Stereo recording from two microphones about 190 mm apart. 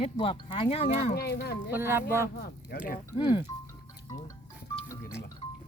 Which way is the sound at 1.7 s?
10° right (ahead or behind).